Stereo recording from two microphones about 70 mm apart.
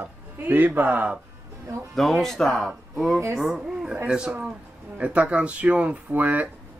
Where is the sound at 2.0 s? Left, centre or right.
Centre.